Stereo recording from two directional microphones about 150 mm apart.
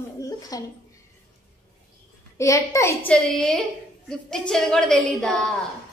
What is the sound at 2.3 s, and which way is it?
Speech, 20° left (ahead or behind).